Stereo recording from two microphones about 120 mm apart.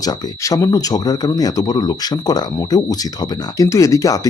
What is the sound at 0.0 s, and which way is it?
Speech, 30° left (ahead or behind).